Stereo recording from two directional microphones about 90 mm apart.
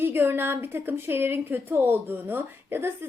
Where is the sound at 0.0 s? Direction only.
25° right (ahead or behind).